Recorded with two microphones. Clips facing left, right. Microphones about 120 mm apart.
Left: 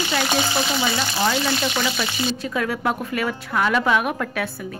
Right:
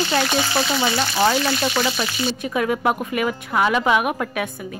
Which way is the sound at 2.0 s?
15° right (ahead or behind).